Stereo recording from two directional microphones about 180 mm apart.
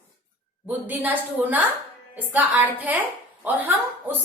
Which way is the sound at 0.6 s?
10° right (ahead or behind).